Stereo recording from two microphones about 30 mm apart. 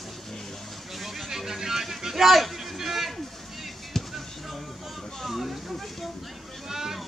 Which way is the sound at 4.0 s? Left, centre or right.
Centre.